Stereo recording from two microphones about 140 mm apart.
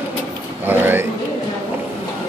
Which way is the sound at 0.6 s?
15° right (ahead or behind).